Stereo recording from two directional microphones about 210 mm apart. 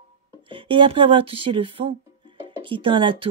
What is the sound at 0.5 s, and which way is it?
Speech, 25° right (ahead or behind).